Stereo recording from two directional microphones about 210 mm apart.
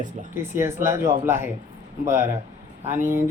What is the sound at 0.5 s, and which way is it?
Speech, 10° right (ahead or behind).